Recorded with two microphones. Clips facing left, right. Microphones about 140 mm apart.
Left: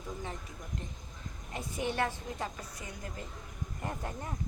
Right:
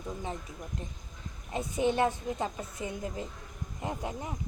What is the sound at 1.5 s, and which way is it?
A woman's voice, 20° right (ahead or behind).